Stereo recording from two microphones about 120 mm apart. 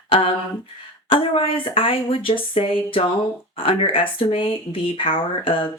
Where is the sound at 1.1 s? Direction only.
50° left (ahead or behind).